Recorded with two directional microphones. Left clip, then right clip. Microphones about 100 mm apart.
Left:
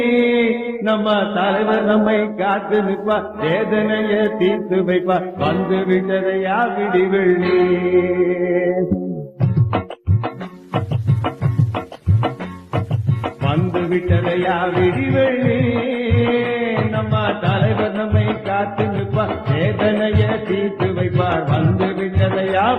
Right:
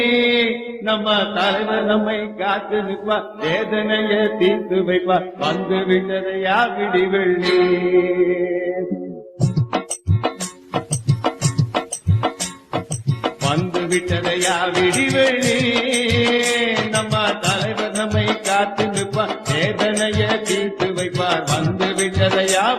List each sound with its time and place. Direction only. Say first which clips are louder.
0.0 s mantra: even; 40° left (ahead or behind)
10.8 s music: even; 45° left (ahead or behind)
13.2 s music: right 1 dB; 40° left (ahead or behind)